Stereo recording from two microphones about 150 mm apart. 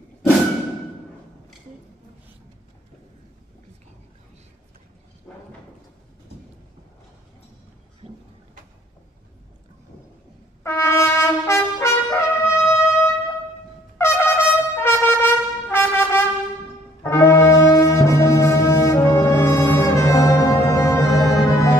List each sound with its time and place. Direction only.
10.6 s trumpet: 15° left (ahead or behind)
17.0 s brass instrument: 20° left (ahead or behind)